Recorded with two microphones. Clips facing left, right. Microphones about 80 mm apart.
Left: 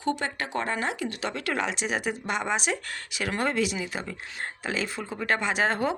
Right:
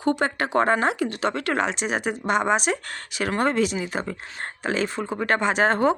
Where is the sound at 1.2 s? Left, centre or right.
Right.